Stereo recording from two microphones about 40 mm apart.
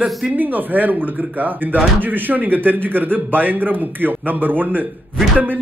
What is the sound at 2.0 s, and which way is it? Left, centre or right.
Speech, right.